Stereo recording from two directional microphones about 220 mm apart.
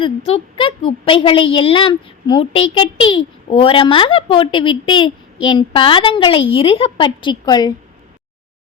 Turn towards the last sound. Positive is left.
turn(degrees=20)  # may be behind; listen again after turning